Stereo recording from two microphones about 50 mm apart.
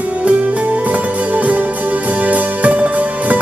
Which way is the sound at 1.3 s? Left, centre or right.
Right.